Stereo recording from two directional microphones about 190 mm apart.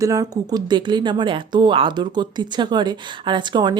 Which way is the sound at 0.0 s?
20° right (ahead or behind).